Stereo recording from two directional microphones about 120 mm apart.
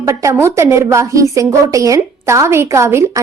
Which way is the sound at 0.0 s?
25° right (ahead or behind).